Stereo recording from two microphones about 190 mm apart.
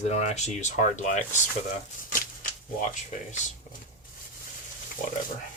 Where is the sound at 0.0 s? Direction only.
35° left (ahead or behind).